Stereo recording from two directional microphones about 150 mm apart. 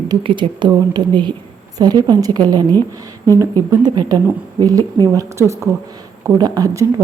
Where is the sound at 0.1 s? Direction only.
35° right (ahead or behind).